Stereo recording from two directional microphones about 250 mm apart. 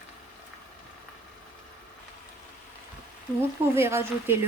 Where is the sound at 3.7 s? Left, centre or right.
Centre.